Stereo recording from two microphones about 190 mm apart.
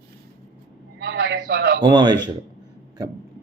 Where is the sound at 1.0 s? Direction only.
60° right (ahead or behind).